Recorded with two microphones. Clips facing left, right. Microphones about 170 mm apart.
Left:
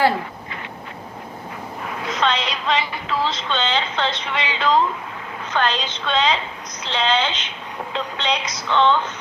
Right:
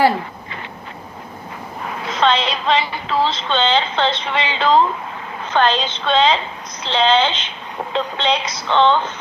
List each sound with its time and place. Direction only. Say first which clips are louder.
2.0 s speech: right 5 dB; 30° right (ahead or behind)